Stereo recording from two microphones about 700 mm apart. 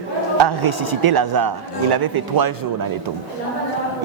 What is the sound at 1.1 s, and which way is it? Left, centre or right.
Speech, right.